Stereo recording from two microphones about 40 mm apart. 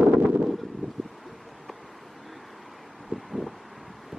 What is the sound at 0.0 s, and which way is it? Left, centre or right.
Wind noise, right.